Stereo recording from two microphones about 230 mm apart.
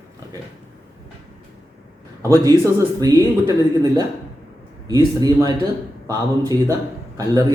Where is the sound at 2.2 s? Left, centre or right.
Centre.